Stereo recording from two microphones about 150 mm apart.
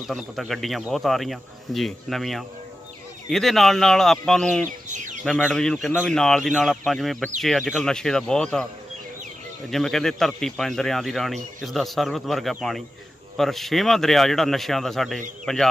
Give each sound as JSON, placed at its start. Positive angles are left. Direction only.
{"t": 0.0, "sound": "speech", "side_deg": 0}
{"t": 4.8, "sound": "chicken", "side_deg": -55}
{"t": 5.2, "sound": "speech", "side_deg": 5}
{"t": 9.7, "sound": "speech", "side_deg": 0}